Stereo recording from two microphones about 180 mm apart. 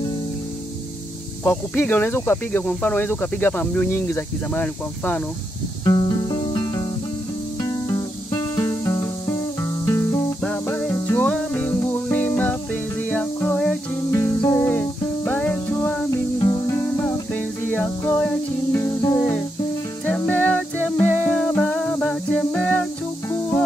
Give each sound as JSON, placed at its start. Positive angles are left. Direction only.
{"t": 1.4, "sound": "speech", "side_deg": 10}
{"t": 5.9, "sound": "music", "side_deg": 25}
{"t": 16.3, "sound": "music", "side_deg": 20}